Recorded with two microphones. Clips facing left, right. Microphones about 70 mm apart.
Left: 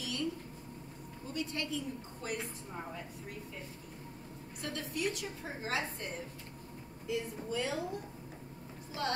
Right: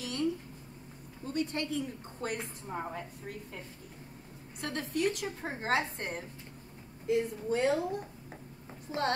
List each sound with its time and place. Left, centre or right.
0.0 s a sound: right
1.2 s a woman's voice: right
8.9 s a woman's voice: right